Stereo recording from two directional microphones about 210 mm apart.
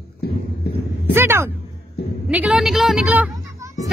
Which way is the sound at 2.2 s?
5° right (ahead or behind).